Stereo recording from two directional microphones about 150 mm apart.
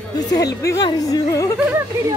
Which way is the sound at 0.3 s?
25° left (ahead or behind).